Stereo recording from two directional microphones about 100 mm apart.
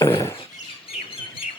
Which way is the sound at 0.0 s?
25° left (ahead or behind).